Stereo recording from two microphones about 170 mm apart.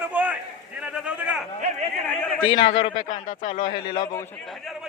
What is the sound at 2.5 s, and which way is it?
Speech, 30° left (ahead or behind).